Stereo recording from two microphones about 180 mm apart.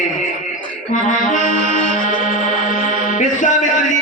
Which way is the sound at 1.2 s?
45° left (ahead or behind).